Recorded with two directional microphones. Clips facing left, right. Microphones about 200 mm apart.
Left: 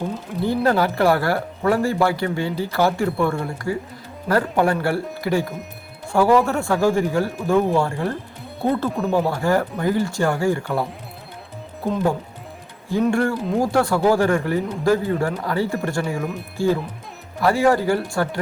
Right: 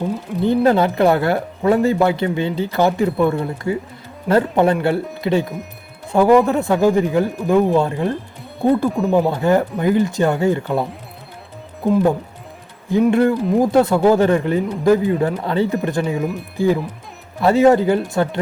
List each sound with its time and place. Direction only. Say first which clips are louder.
0.4 s speech: right 4 dB; 20° right (ahead or behind)
8.9 s speech: right 4 dB; centre (ahead or behind)
9.3 s speech: right 4 dB; 20° right (ahead or behind)